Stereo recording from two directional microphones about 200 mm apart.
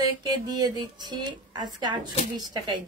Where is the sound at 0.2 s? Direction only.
20° right (ahead or behind).